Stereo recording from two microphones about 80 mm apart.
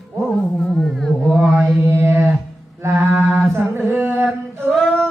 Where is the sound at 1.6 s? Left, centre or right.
Right.